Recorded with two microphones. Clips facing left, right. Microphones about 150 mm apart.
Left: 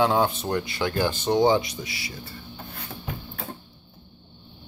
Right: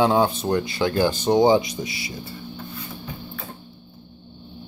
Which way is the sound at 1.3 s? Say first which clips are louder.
Right 3 dB; 15° right (ahead or behind).